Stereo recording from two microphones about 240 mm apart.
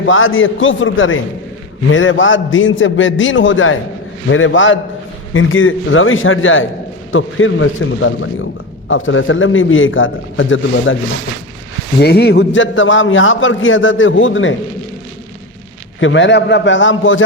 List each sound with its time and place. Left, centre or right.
0.0 s a man's voice: left
11.9 s a man's voice: left
16.0 s a man's voice: left